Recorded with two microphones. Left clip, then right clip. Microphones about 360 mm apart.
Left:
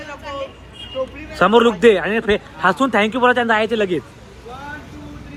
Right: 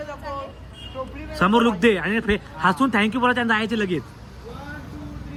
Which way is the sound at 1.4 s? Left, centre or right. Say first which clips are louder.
Left 6 dB; left.